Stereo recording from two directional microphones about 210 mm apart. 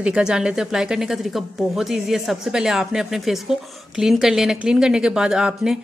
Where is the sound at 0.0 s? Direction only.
5° right (ahead or behind).